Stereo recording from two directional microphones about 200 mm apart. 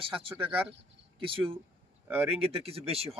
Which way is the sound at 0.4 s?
10° right (ahead or behind).